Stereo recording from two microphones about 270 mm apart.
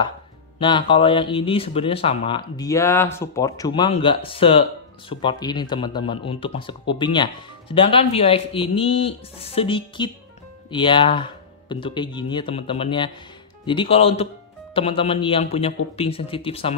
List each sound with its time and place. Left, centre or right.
0.6 s speech: centre